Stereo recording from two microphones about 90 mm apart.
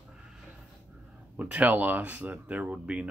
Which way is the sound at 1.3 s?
15° right (ahead or behind).